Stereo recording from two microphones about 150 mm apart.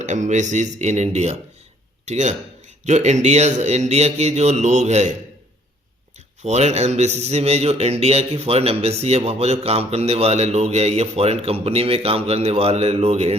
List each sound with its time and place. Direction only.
0.0 s a man's voice: 55° right (ahead or behind)
6.1 s a man's voice: 50° right (ahead or behind)